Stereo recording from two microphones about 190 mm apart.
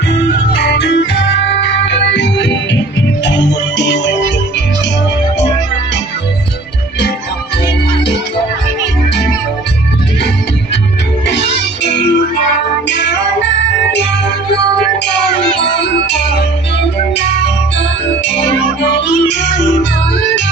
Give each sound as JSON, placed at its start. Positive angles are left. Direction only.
{"t": 0.1, "sound": "music", "side_deg": 70}
{"t": 11.3, "sound": "music", "side_deg": 70}
{"t": 15.8, "sound": "music", "side_deg": 65}
{"t": 19.3, "sound": "music", "side_deg": 65}